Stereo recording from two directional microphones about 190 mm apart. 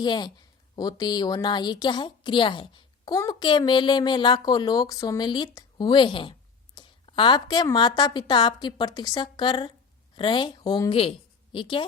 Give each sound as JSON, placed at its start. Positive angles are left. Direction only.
{"t": 0.0, "sound": "a woman's voice", "side_deg": 25}